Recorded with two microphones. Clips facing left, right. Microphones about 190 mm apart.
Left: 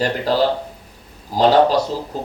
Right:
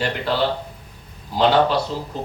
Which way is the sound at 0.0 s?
40° left (ahead or behind).